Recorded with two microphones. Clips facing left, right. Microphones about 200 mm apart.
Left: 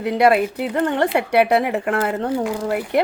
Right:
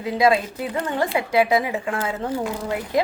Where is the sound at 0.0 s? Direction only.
65° left (ahead or behind).